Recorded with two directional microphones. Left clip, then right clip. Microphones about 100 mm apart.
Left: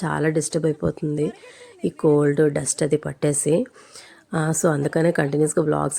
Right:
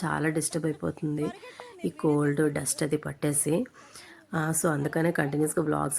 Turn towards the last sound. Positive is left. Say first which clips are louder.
# left 7 dB
turn(degrees=35)  # may be behind; listen again after turning